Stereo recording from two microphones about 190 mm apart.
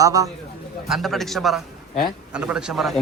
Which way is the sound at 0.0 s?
15° right (ahead or behind).